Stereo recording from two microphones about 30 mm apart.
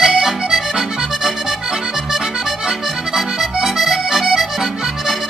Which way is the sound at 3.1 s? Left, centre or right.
Centre.